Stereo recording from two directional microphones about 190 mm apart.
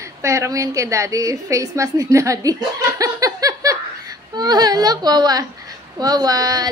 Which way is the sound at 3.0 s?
20° right (ahead or behind).